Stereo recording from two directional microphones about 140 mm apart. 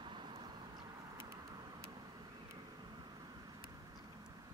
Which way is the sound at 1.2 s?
30° right (ahead or behind).